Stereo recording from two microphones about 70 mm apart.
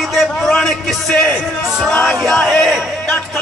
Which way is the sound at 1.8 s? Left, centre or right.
Centre.